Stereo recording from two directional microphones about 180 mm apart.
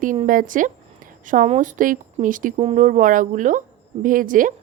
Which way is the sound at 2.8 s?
45° right (ahead or behind).